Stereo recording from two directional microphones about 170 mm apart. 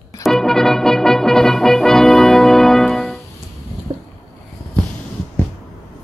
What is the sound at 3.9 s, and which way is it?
Boat, 30° right (ahead or behind).